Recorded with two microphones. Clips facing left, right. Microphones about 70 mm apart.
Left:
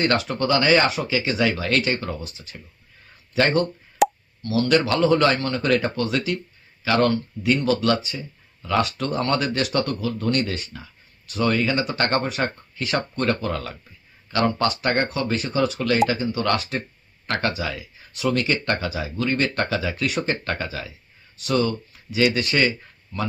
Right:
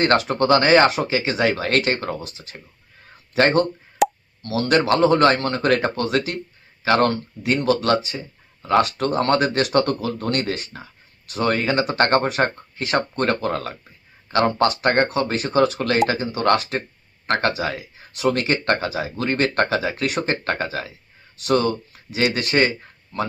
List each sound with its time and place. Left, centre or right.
0.0 s speech: right
3.3 s speech: right
4.0 s plop: centre
4.4 s speech: right